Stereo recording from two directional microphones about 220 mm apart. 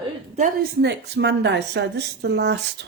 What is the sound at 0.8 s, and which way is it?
Speech, 50° right (ahead or behind).